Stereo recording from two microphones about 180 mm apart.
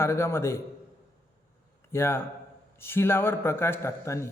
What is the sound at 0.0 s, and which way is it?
Speech, 15° left (ahead or behind).